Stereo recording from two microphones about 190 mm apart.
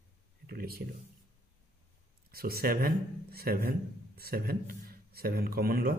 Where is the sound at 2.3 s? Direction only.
55° right (ahead or behind).